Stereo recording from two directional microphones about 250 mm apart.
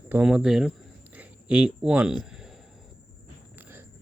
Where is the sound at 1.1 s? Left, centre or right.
Centre.